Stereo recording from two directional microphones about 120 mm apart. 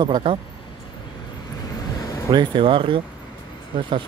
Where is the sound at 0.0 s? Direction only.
40° right (ahead or behind).